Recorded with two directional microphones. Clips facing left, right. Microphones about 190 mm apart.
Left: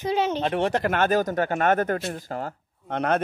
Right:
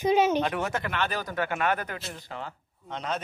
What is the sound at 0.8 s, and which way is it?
Speech, 45° left (ahead or behind).